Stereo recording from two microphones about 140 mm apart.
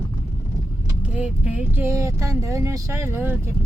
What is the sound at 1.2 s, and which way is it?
Speech, 10° right (ahead or behind).